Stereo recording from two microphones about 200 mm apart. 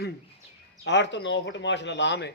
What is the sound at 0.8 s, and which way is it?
A man's voice, 60° left (ahead or behind).